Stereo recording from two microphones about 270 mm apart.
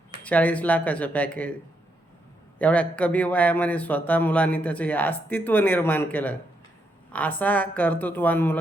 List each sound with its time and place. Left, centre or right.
0.3 s a man's voice: centre
2.6 s a man's voice: centre